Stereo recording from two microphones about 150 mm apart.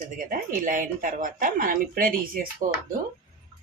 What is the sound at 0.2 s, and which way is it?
Speech, 65° right (ahead or behind).